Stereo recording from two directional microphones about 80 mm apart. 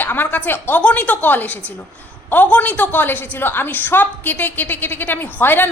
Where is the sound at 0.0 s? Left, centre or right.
Left.